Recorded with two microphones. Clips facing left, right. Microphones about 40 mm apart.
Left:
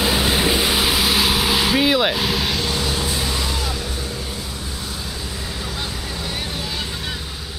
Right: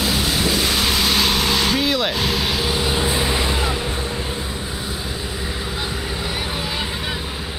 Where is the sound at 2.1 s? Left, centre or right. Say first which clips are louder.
Even; centre.